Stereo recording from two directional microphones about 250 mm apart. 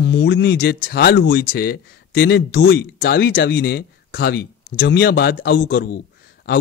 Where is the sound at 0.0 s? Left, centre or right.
Left.